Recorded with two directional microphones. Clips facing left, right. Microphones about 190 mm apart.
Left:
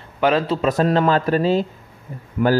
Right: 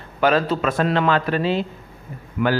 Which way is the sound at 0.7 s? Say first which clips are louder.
Left 3 dB; 40° left (ahead or behind).